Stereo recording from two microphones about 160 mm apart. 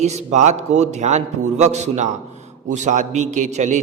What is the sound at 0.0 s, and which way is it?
A man's voice, 45° right (ahead or behind).